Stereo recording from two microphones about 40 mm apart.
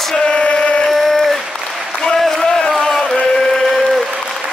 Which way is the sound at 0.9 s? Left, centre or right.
Centre.